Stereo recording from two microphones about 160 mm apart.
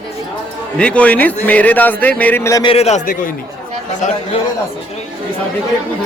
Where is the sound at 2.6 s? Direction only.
40° left (ahead or behind).